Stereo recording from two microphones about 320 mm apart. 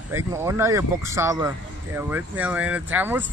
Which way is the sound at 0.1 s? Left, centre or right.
Centre.